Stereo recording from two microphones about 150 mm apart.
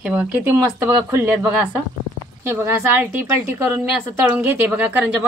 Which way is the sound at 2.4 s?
15° right (ahead or behind).